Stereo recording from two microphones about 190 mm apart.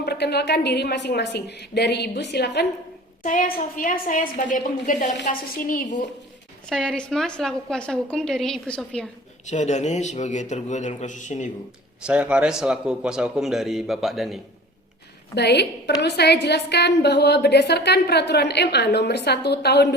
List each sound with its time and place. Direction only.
0.0 s a woman's voice: 60° left (ahead or behind)
3.2 s a woman's voice: 45° left (ahead or behind)
6.7 s a woman's voice: 5° left (ahead or behind)
9.5 s a man's voice: 40° left (ahead or behind)
12.0 s a woman's voice: 5° right (ahead or behind)
15.4 s a woman's voice: 60° left (ahead or behind)